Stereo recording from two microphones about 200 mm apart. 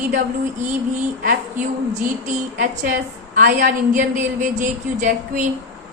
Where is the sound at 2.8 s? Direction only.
45° right (ahead or behind).